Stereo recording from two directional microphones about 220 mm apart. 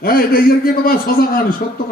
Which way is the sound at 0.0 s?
40° left (ahead or behind).